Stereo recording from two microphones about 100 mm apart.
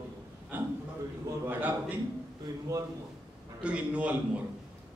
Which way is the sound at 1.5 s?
15° right (ahead or behind).